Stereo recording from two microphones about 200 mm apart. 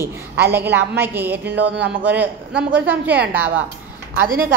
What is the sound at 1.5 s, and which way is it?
Speech, 55° right (ahead or behind).